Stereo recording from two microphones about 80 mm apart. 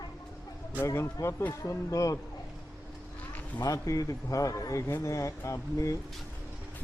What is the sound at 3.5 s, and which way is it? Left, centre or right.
Speech, left.